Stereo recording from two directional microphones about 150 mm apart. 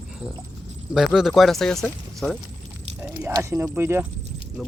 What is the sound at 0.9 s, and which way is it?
Speech, centre (ahead or behind).